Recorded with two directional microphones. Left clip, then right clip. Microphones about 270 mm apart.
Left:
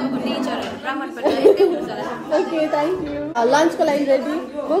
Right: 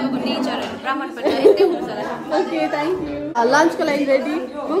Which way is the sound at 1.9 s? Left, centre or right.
Centre.